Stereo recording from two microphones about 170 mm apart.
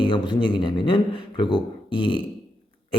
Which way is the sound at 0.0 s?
30° left (ahead or behind).